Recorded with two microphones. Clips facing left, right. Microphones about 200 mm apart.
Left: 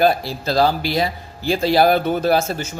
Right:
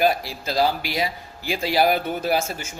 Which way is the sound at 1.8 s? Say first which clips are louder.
Left 3 dB; 40° left (ahead or behind).